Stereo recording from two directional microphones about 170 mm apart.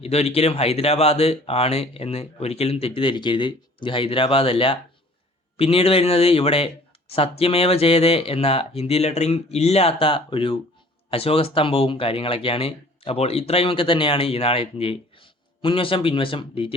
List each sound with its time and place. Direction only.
0.0 s speech: 40° left (ahead or behind)